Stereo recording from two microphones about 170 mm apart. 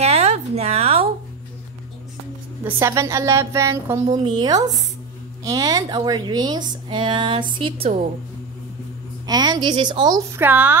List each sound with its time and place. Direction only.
0.0 s a sound: 40° right (ahead or behind)
2.6 s a woman's voice: 15° right (ahead or behind); by 7.9 s 30° right (ahead or behind)
9.2 s speech: 25° right (ahead or behind)